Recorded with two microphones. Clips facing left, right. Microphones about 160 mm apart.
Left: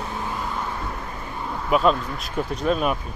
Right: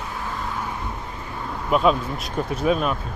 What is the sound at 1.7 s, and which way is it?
Speech, centre (ahead or behind).